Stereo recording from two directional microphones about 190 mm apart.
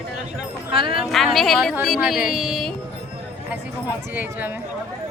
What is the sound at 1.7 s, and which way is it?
Speech, 5° right (ahead or behind).